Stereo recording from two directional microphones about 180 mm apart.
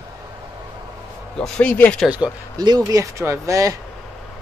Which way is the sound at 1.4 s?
5° left (ahead or behind).